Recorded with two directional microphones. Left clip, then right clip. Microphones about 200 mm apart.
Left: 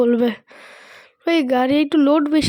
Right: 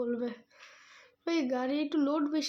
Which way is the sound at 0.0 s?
45° left (ahead or behind).